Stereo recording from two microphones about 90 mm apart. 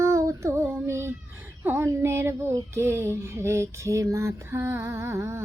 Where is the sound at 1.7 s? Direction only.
30° right (ahead or behind).